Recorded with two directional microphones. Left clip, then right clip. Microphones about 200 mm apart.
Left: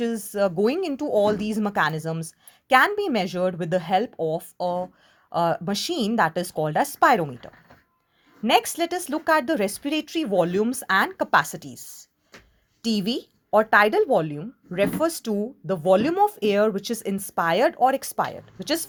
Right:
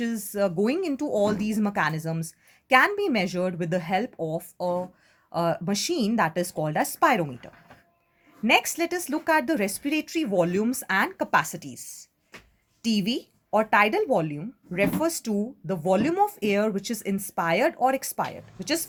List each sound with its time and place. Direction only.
0.0 s speech: 20° left (ahead or behind)